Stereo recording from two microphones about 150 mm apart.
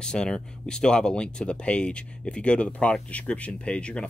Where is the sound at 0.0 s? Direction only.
5° left (ahead or behind).